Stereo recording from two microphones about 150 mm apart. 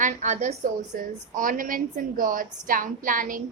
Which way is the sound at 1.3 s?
65° right (ahead or behind).